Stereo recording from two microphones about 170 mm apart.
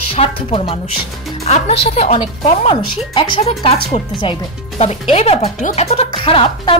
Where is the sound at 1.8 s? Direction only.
35° left (ahead or behind).